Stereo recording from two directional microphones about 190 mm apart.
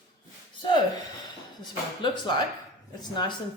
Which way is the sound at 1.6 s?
25° left (ahead or behind).